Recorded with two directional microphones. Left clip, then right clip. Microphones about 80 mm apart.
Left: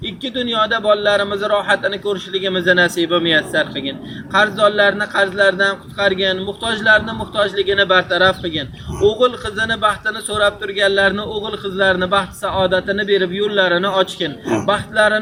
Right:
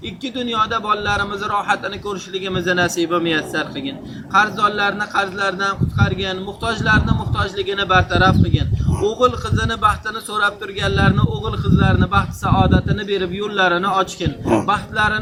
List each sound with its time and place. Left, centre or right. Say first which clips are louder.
0.3 s a man's voice: left 2 dB; centre